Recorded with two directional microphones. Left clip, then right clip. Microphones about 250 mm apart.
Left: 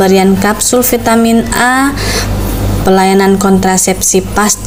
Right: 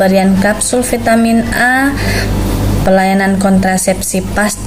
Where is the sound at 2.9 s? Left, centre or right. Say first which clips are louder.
Left 5 dB; left.